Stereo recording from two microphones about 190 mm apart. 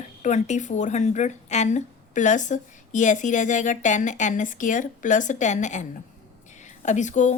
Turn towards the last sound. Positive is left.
turn(degrees=40)  # may be behind; listen again after turning